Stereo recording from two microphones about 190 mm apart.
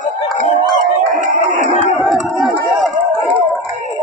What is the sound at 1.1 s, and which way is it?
Music, 40° right (ahead or behind).